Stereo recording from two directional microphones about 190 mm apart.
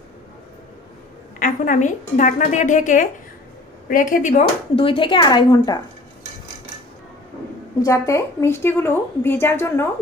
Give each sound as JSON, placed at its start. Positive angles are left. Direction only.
{"t": 1.4, "sound": "a woman's voice", "side_deg": 45}
{"t": 7.8, "sound": "a woman's voice", "side_deg": 15}